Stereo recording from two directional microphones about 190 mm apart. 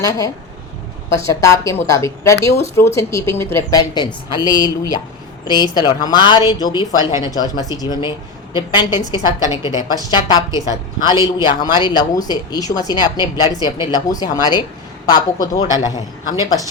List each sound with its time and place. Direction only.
0.0 s a woman's voice: 15° left (ahead or behind)